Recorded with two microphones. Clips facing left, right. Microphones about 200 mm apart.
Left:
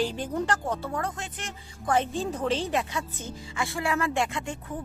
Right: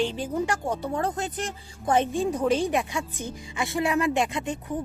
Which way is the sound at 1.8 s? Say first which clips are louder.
Right 3 dB; 20° right (ahead or behind).